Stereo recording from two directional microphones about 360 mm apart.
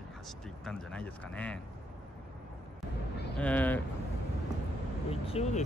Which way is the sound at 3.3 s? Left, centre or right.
Centre.